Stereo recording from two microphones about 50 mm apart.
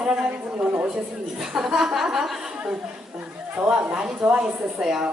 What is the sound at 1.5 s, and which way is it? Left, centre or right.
Speech, centre.